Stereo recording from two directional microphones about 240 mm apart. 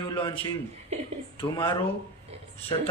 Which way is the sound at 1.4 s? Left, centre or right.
Centre.